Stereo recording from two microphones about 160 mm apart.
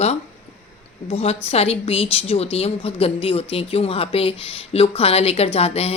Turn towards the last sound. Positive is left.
turn(degrees=40)  # may be behind; listen again after turning